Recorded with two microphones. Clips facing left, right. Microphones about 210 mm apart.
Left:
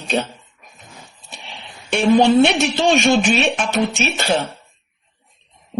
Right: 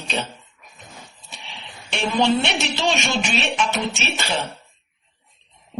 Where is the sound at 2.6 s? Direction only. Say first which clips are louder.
Left 7 dB; 50° left (ahead or behind).